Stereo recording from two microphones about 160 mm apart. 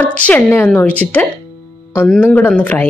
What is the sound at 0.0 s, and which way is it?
A woman's voice, 10° left (ahead or behind).